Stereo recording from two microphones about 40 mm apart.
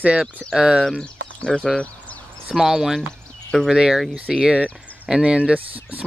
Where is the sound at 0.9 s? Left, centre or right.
Centre.